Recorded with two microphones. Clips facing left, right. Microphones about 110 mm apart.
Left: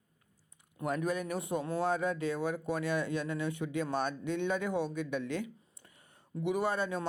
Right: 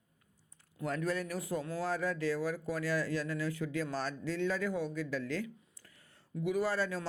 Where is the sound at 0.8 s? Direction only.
20° left (ahead or behind).